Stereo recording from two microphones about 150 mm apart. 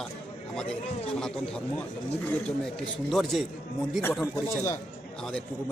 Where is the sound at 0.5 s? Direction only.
5° left (ahead or behind).